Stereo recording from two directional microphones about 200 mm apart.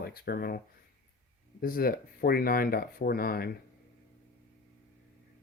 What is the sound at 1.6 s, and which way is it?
Speech, 45° left (ahead or behind).